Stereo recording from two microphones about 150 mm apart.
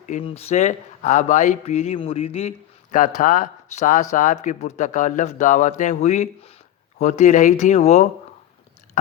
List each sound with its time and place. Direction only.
0.2 s speech: 40° left (ahead or behind)
3.2 s a man's voice: 60° left (ahead or behind); by 8.0 s 45° left (ahead or behind)